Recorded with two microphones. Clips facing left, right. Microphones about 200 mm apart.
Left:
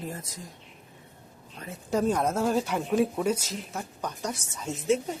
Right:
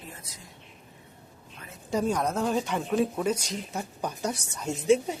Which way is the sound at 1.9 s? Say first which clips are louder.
Left 1 dB; 5° left (ahead or behind).